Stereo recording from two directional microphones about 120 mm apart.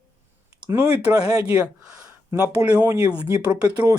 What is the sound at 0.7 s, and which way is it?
Speech, 20° right (ahead or behind).